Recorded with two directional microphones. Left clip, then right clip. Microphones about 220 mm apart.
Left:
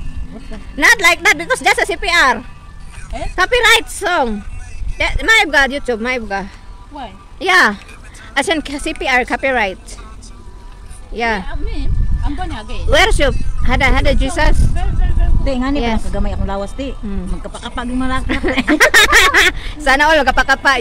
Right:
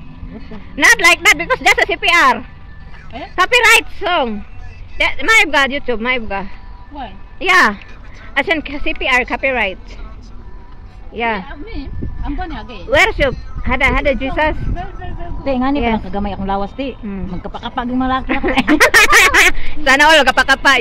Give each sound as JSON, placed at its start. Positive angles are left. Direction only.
{"t": 0.5, "sound": "a woman's voice", "side_deg": 20}
{"t": 11.1, "sound": "speech", "side_deg": 30}
{"t": 11.4, "sound": "speech", "side_deg": 10}
{"t": 12.9, "sound": "speech", "side_deg": 30}
{"t": 15.4, "sound": "speech", "side_deg": -25}
{"t": 18.2, "sound": "speech", "side_deg": 25}
{"t": 20.0, "sound": "speech", "side_deg": 10}